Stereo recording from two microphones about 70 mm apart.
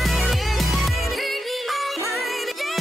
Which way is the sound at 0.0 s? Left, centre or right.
Centre.